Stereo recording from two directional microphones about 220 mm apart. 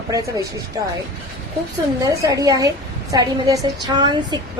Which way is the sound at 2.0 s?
15° right (ahead or behind).